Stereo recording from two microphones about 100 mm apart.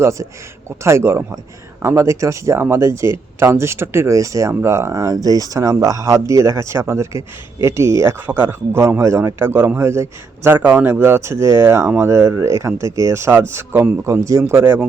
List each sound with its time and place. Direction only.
0.0 s speech: 30° right (ahead or behind)